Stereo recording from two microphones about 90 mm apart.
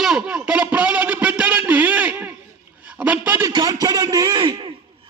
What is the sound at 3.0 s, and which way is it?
Speech, 15° right (ahead or behind).